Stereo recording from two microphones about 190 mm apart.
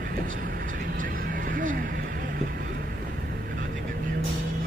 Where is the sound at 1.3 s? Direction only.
45° right (ahead or behind).